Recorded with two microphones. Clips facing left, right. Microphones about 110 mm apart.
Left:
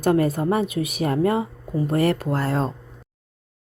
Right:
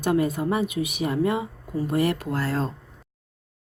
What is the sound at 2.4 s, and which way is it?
Speech, 20° left (ahead or behind).